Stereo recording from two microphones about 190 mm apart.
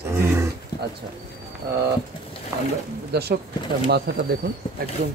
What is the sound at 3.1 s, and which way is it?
Speech, 60° right (ahead or behind).